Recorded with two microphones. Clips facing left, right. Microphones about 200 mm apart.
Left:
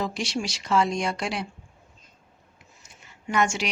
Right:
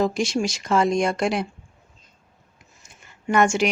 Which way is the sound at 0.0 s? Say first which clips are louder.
Right 7 dB; 50° right (ahead or behind).